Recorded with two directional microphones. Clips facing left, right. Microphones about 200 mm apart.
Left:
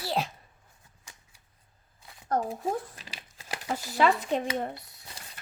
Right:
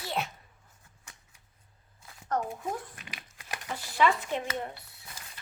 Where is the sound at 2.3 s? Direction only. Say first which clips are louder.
Left 3 dB; 30° left (ahead or behind).